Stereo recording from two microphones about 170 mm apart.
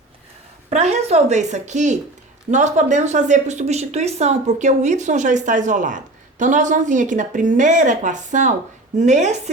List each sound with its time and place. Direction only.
0.7 s a woman's voice: 40° right (ahead or behind)